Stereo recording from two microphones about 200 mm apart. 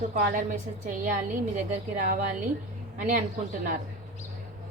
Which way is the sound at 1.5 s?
45° right (ahead or behind).